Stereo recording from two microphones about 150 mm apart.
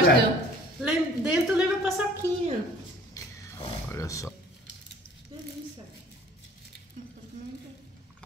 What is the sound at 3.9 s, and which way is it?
Speech, 20° left (ahead or behind).